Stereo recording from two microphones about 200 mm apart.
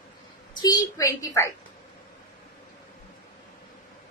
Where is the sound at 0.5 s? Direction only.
20° left (ahead or behind).